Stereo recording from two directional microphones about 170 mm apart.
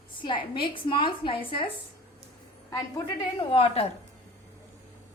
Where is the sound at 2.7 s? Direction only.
25° left (ahead or behind).